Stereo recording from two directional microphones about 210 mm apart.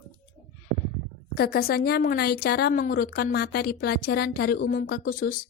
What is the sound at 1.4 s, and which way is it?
A woman's voice, 45° left (ahead or behind).